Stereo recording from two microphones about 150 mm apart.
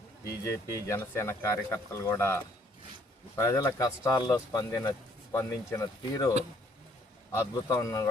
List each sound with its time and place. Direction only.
0.3 s speech: 20° left (ahead or behind)
7.5 s speech: 25° left (ahead or behind)